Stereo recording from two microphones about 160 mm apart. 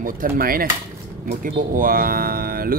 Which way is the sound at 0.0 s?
60° right (ahead or behind).